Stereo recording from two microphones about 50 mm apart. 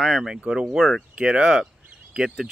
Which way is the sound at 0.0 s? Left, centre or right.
Centre.